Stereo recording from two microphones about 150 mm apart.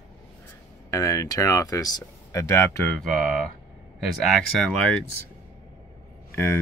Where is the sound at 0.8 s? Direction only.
20° left (ahead or behind).